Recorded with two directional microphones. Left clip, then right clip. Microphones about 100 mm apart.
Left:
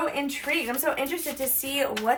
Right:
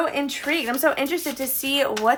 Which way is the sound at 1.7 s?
70° right (ahead or behind).